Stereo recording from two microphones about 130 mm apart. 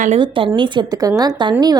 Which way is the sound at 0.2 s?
40° right (ahead or behind).